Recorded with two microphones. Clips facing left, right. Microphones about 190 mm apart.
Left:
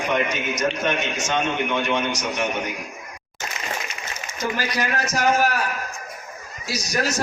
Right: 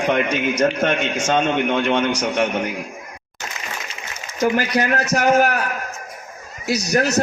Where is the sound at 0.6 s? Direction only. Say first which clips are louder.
Right 4 dB; 55° right (ahead or behind).